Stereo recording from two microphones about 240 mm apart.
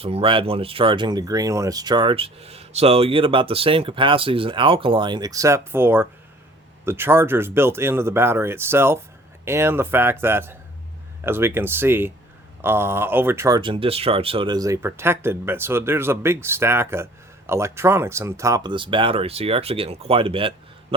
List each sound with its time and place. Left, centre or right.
0.0 s speech: right